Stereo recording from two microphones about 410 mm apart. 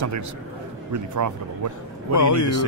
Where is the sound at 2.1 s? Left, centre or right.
Left.